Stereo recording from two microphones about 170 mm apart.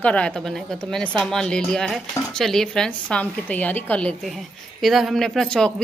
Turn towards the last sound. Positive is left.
turn(degrees=5)  # may be behind; listen again after turning